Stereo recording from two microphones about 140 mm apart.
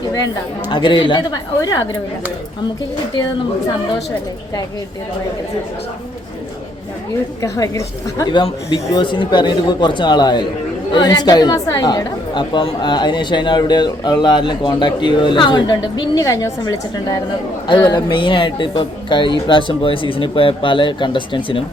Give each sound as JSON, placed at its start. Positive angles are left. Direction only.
{"t": 0.7, "sound": "a woman's voice", "side_deg": 35}
{"t": 7.4, "sound": "a woman's voice", "side_deg": 20}